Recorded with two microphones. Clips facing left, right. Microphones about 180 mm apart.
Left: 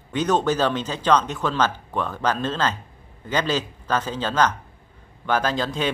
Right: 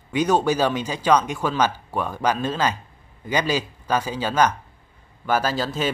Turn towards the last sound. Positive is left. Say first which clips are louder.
# even
turn(degrees=-5)  # may be behind; listen again after turning